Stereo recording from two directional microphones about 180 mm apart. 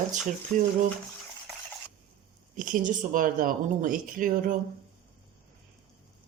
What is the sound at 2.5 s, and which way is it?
Speech, 50° right (ahead or behind).